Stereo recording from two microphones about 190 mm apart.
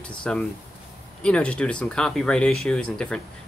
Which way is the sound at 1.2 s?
5° left (ahead or behind).